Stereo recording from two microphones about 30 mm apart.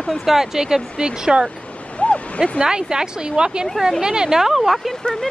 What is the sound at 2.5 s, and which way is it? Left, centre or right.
A woman's voice, right.